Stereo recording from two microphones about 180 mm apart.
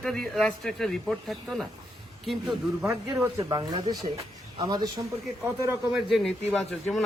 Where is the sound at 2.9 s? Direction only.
15° right (ahead or behind).